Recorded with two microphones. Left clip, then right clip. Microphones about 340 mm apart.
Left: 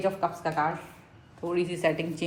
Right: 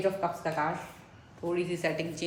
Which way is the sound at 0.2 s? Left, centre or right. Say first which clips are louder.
Left 3 dB; centre.